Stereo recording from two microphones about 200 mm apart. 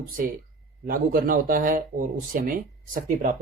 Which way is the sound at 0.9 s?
45° right (ahead or behind).